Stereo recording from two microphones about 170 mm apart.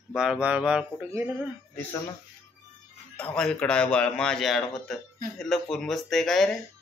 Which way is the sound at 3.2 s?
5° left (ahead or behind).